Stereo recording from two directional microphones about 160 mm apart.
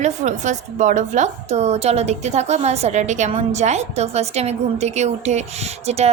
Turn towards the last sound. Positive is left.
turn(degrees=-40)  # may be behind; listen again after turning